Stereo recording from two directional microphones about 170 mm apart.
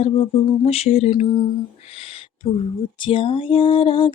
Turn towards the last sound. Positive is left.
turn(degrees=30)  # may be behind; listen again after turning